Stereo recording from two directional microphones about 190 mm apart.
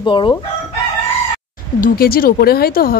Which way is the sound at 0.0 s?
25° left (ahead or behind).